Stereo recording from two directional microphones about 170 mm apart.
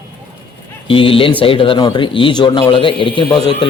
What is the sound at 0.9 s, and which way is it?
Speech, 30° left (ahead or behind).